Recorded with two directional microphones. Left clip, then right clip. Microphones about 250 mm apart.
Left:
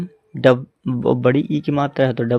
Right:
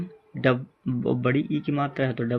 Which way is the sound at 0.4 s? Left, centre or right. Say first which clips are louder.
Left 9 dB; left.